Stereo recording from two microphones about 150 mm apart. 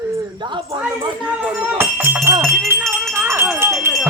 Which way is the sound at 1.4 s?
10° right (ahead or behind).